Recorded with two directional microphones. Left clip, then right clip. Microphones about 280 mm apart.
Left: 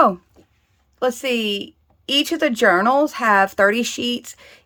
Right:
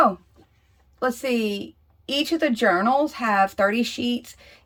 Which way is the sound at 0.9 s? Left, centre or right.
Centre.